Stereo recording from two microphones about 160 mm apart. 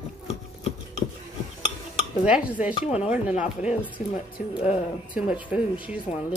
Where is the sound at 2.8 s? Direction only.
40° left (ahead or behind).